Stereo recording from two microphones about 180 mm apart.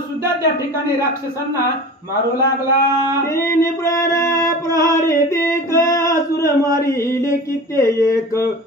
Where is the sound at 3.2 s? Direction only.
15° left (ahead or behind).